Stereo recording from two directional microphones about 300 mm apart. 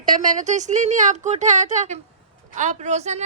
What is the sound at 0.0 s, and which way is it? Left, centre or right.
A woman's voice, right.